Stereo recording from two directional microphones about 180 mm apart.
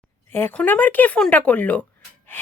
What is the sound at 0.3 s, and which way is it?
A woman's voice, 10° left (ahead or behind).